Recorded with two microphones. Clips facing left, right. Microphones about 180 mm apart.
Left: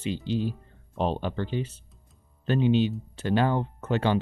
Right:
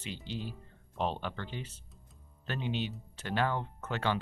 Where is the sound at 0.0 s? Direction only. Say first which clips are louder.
Left 12 dB; 25° left (ahead or behind).